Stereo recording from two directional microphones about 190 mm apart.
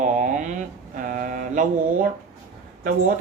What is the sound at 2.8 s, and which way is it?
Speech, 45° right (ahead or behind).